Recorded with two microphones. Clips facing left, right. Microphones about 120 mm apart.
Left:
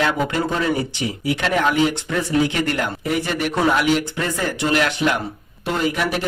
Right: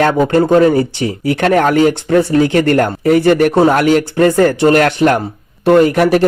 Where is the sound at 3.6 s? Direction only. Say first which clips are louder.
Right 8 dB; 45° right (ahead or behind).